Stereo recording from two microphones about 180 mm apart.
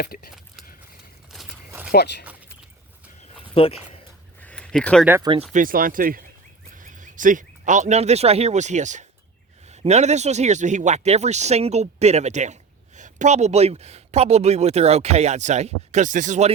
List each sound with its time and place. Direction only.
0.0 s speech: 55° left (ahead or behind)
1.3 s a sound: 5° right (ahead or behind)
1.9 s speech: 65° left (ahead or behind)
3.5 s speech: 30° left (ahead or behind)
4.4 s a sound: 5° left (ahead or behind)
5.2 s speech: 30° right (ahead or behind)
5.5 s speech: 50° right (ahead or behind)